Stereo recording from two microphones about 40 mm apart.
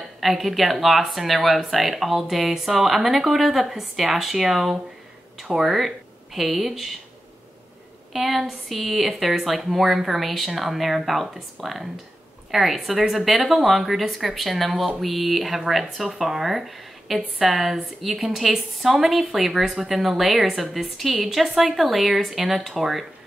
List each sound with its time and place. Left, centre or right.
0.2 s speech: centre
8.1 s speech: centre